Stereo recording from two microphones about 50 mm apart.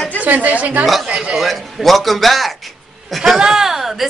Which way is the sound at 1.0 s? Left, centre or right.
Centre.